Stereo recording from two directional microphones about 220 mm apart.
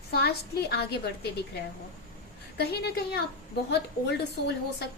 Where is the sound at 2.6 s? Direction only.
45° left (ahead or behind).